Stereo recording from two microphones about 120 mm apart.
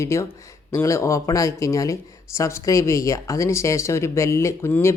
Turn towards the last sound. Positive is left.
turn(degrees=25)  # may be behind; listen again after turning